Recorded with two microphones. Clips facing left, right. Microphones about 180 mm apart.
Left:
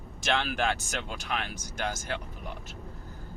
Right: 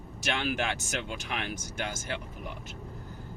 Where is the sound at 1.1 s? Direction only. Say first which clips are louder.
Left 1 dB; 40° left (ahead or behind).